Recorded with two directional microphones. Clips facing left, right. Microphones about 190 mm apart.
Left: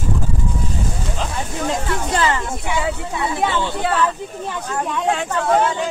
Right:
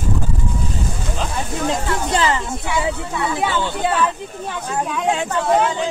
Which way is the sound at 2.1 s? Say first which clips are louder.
Right 1 dB; 20° right (ahead or behind).